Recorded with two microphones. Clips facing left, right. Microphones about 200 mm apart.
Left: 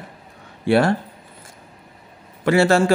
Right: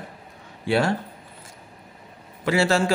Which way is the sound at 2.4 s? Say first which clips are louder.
Left 5 dB; 55° left (ahead or behind).